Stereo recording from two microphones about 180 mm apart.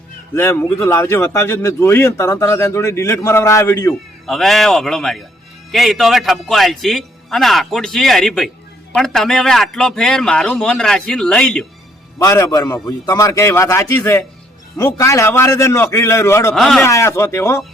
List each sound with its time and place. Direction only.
0.3 s speech: 15° left (ahead or behind)
4.3 s a man's voice: centre (ahead or behind)
12.2 s speech: 15° left (ahead or behind)
16.6 s a man's voice: centre (ahead or behind)
16.8 s speech: 15° left (ahead or behind)